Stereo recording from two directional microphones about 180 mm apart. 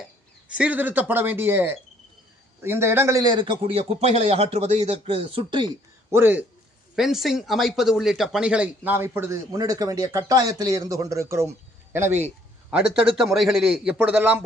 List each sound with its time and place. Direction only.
0.0 s a man's voice: 5° right (ahead or behind); by 5.6 s 30° right (ahead or behind)
6.1 s a man's voice: 10° right (ahead or behind)